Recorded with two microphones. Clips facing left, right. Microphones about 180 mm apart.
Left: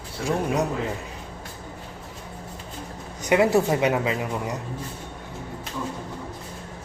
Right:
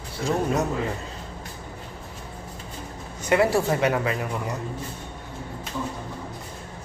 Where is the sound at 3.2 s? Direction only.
20° left (ahead or behind).